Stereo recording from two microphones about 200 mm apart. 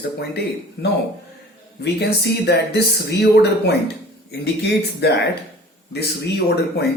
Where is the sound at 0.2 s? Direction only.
55° left (ahead or behind).